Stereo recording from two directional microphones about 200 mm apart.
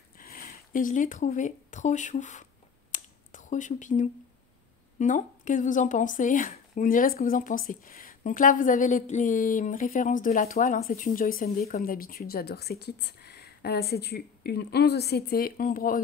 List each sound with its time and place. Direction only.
0.2 s speech: 45° left (ahead or behind)
2.9 s a sound: 40° left (ahead or behind)
4.9 s speech: 40° left (ahead or behind)